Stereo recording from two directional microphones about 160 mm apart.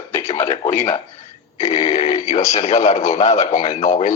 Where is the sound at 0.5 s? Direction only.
15° left (ahead or behind).